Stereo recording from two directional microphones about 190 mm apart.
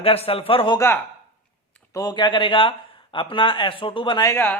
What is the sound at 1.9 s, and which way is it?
A man's voice, 20° left (ahead or behind).